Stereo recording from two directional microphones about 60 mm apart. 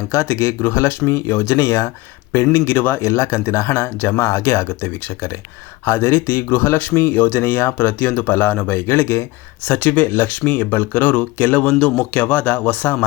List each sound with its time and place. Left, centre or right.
0.1 s speech: left
4.2 s speech: left